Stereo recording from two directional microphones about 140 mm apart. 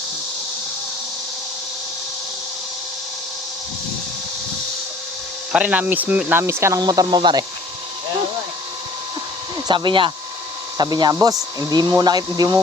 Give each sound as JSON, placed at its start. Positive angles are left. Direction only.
{"t": 5.5, "sound": "speech", "side_deg": -10}
{"t": 9.6, "sound": "speech", "side_deg": -35}